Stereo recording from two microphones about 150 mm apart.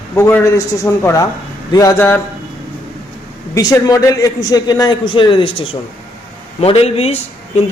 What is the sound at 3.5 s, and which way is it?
A man's voice, 20° left (ahead or behind).